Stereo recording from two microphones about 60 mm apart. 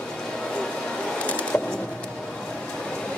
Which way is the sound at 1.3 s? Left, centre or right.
Left.